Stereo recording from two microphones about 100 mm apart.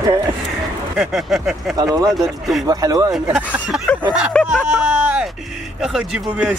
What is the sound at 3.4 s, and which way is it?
Speech, 15° right (ahead or behind).